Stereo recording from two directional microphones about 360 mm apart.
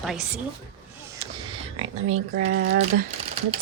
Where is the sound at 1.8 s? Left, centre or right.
Right.